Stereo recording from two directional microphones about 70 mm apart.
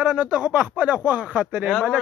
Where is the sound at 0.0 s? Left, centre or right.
Centre.